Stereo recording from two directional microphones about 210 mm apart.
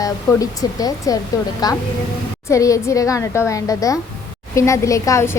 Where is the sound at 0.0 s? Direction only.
15° left (ahead or behind).